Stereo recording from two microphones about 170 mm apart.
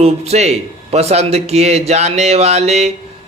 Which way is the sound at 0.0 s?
40° right (ahead or behind).